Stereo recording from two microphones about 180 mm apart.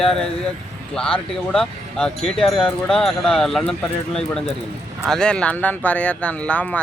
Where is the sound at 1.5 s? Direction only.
5° left (ahead or behind).